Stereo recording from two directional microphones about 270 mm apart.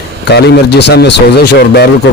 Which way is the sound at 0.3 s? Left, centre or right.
Left.